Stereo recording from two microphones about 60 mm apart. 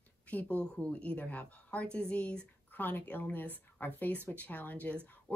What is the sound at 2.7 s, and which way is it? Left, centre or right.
A woman's voice, left.